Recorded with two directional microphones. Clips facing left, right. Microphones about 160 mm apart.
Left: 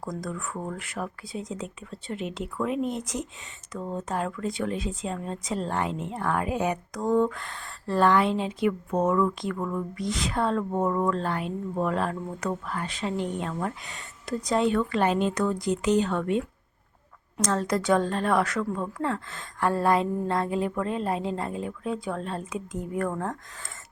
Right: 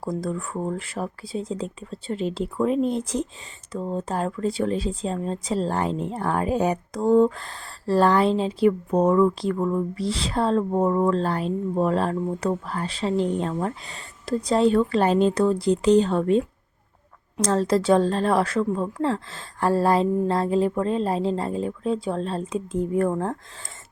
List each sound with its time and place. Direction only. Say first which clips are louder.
0.0 s a woman's voice: right 6 dB; 30° right (ahead or behind)